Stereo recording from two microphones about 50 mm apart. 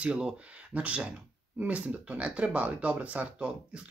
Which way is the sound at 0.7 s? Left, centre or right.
Right.